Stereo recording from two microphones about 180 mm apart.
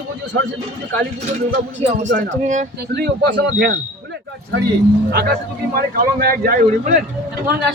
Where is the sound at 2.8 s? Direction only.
65° right (ahead or behind).